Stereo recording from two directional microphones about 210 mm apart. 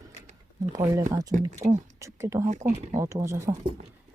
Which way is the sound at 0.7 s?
15° right (ahead or behind).